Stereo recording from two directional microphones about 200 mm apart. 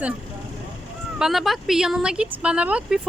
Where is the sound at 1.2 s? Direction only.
Centre (ahead or behind).